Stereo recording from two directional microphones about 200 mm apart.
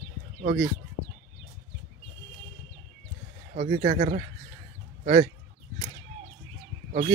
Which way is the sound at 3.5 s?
40° right (ahead or behind).